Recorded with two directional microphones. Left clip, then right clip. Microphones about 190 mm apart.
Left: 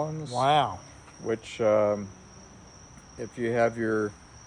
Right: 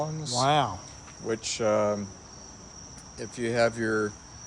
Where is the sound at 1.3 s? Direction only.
30° left (ahead or behind).